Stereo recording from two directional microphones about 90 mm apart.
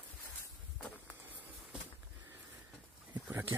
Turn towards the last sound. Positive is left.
turn(degrees=-25)  # may be behind; listen again after turning